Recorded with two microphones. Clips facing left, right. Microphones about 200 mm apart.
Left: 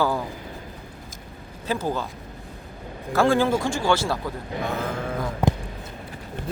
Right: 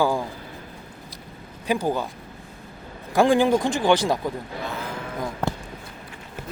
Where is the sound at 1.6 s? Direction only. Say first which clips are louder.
Right 2 dB; 15° right (ahead or behind).